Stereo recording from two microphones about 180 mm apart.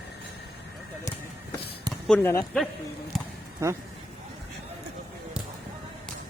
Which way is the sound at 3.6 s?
15° right (ahead or behind).